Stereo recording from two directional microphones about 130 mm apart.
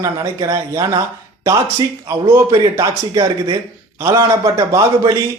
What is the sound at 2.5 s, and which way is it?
A man's voice, 30° right (ahead or behind).